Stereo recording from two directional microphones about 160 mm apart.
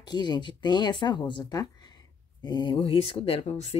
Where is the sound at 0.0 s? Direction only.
25° left (ahead or behind).